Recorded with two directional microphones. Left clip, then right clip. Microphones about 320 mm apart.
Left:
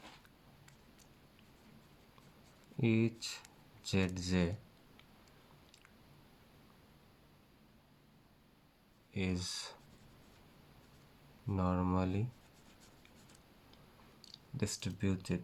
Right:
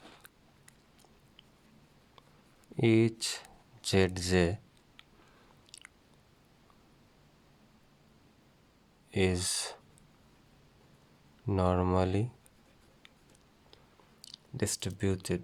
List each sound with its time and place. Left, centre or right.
2.7 s speech: right
9.1 s speech: right
11.4 s speech: right
14.2 s speech: right